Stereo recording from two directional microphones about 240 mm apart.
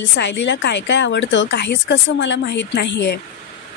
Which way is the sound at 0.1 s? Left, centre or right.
Left.